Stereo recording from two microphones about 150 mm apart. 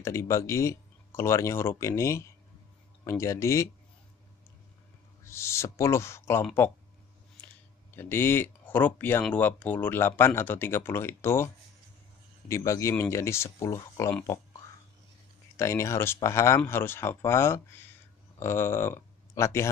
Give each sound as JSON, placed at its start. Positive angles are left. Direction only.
{"t": 0.0, "sound": "speech", "side_deg": 20}
{"t": 5.2, "sound": "speech", "side_deg": 15}
{"t": 7.9, "sound": "speech", "side_deg": 15}
{"t": 15.5, "sound": "speech", "side_deg": 20}